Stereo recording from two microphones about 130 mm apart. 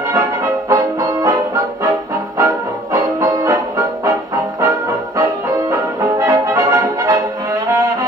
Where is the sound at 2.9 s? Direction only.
25° right (ahead or behind).